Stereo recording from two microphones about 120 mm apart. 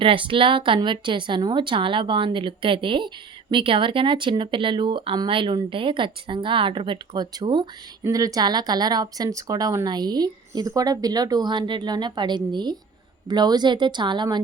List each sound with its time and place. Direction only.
0.0 s speech: 45° right (ahead or behind)
8.0 s speech: 30° right (ahead or behind)